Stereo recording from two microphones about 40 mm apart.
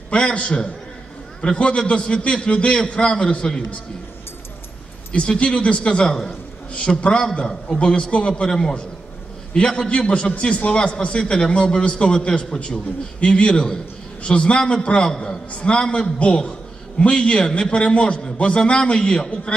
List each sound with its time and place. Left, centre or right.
0.1 s a man's voice: left
5.1 s a man's voice: left
8.5 s a man's voice: centre
15.0 s a man's voice: centre